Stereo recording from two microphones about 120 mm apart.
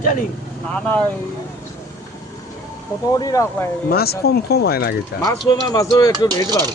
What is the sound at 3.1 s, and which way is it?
Speech, 30° left (ahead or behind).